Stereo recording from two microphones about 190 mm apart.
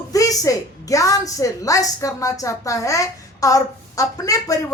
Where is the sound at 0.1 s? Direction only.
20° left (ahead or behind).